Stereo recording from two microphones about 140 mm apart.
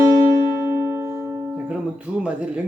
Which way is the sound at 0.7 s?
20° right (ahead or behind).